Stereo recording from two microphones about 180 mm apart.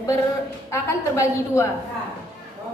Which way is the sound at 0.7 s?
15° left (ahead or behind).